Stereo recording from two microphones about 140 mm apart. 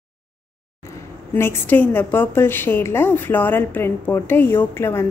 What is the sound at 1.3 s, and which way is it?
A woman's voice, 15° left (ahead or behind).